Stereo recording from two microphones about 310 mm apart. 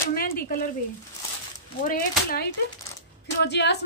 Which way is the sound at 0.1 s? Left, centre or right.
Left.